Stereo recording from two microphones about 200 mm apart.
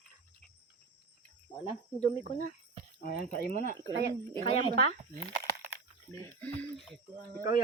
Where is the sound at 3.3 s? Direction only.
50° left (ahead or behind).